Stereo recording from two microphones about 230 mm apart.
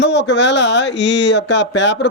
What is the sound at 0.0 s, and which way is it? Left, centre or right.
Speech, left.